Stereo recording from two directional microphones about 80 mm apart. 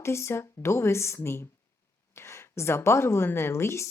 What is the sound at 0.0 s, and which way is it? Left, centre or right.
A woman's voice, left.